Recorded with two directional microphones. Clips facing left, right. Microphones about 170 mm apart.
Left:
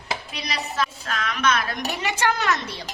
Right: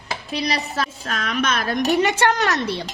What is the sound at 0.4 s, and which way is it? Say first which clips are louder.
A woman's voice: right 2 dB; 35° right (ahead or behind).